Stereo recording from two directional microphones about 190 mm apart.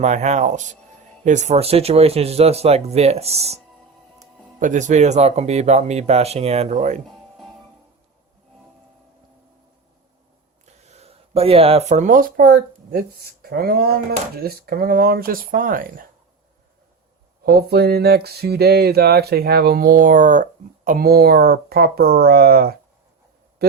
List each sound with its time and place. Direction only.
0.0 s speech: 35° right (ahead or behind)
4.6 s speech: 40° right (ahead or behind)
7.3 s music: centre (ahead or behind)
10.7 s speech: 35° right (ahead or behind)
17.4 s a sound: 55° right (ahead or behind)